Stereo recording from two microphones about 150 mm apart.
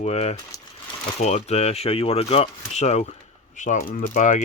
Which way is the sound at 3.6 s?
55° left (ahead or behind).